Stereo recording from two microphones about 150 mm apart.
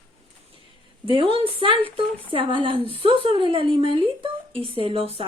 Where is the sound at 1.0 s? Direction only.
35° right (ahead or behind).